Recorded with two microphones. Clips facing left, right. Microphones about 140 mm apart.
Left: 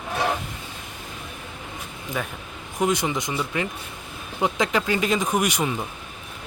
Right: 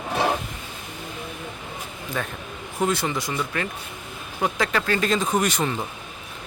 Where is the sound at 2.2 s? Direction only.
10° left (ahead or behind).